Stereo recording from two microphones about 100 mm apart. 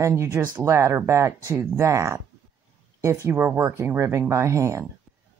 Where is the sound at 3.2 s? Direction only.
20° right (ahead or behind).